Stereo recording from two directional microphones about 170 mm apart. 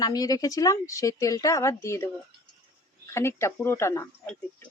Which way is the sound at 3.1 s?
15° left (ahead or behind).